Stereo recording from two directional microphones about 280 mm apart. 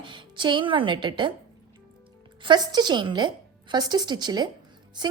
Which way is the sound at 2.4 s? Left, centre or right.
Centre.